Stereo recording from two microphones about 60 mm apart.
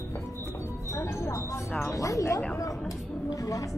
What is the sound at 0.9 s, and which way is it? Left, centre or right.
Music, left.